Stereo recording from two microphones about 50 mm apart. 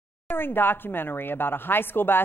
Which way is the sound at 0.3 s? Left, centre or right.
Left.